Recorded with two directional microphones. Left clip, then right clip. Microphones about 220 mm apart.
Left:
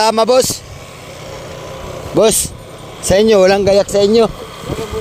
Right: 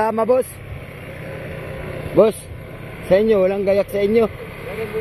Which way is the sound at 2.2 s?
55° left (ahead or behind).